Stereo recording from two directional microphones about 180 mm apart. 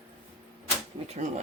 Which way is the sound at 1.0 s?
35° right (ahead or behind).